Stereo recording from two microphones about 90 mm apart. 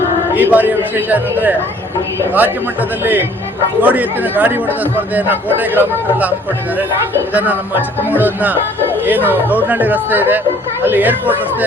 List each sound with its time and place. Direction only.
0.3 s a man's voice: 20° right (ahead or behind)